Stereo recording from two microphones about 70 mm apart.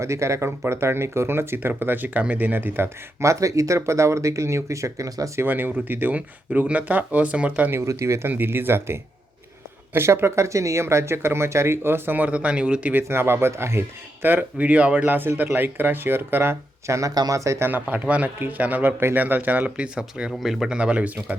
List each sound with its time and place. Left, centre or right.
0.0 s speech: right
3.2 s speech: right
5.4 s speech: right
7.7 s speech: right
8.3 s speech: right
12.9 s speech: right; by 15.1 s centre
15.1 s speech: right
17.7 s speech: right